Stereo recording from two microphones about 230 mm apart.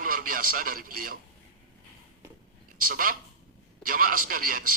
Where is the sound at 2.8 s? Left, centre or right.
Right.